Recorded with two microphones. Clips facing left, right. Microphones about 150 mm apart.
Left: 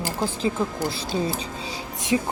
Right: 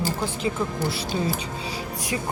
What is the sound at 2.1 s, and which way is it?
Speech, 20° left (ahead or behind).